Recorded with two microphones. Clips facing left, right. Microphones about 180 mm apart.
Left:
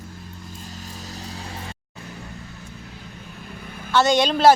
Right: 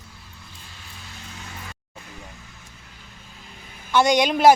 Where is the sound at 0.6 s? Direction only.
40° left (ahead or behind).